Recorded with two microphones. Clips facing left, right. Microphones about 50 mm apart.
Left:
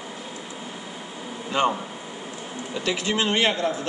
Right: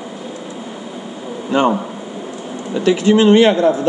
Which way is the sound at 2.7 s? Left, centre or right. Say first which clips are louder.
Right 13 dB; centre.